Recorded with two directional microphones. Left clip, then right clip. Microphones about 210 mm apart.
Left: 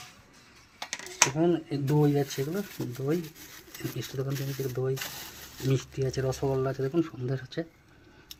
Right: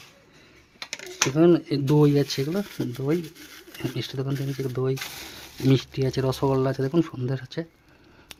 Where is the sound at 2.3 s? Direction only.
35° right (ahead or behind).